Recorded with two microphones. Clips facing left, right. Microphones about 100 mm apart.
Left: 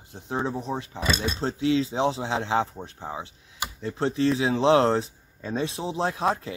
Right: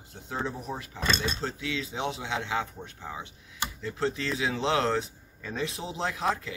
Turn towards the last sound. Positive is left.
turn(degrees=30)  # may be behind; listen again after turning